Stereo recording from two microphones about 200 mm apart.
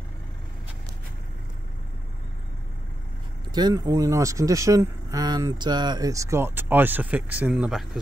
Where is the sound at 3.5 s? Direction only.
20° right (ahead or behind).